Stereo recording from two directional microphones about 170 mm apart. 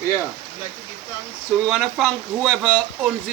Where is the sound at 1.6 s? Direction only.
Centre (ahead or behind).